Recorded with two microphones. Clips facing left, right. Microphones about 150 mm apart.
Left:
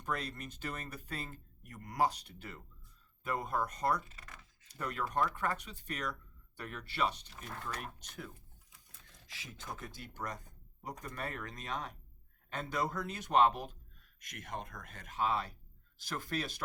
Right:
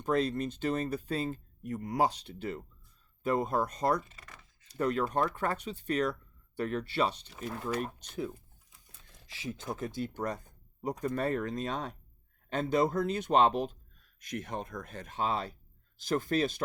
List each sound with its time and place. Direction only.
0.0 s speech: 25° right (ahead or behind)
4.1 s a sound: centre (ahead or behind)
4.8 s speech: 25° right (ahead or behind)
7.4 s speech: 10° right (ahead or behind)
7.7 s speech: 30° right (ahead or behind)
9.3 s speech: 25° right (ahead or behind)